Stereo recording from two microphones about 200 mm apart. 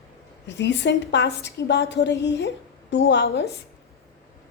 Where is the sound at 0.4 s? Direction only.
60° left (ahead or behind).